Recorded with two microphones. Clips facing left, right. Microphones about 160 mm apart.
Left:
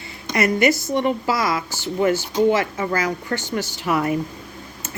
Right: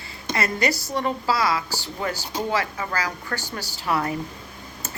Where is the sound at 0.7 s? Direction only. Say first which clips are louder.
Left 6 dB; 20° left (ahead or behind).